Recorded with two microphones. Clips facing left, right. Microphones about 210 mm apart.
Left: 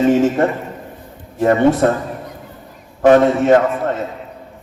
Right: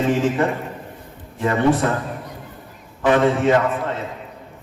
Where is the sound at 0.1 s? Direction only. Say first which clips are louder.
Left 5 dB; 45° left (ahead or behind).